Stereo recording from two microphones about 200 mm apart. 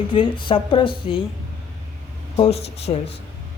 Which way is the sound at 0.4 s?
25° left (ahead or behind).